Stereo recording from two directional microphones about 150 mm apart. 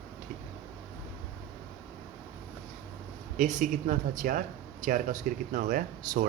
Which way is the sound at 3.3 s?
60° right (ahead or behind).